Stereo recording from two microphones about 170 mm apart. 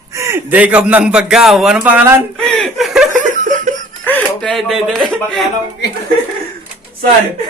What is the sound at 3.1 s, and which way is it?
Laughter, 50° right (ahead or behind).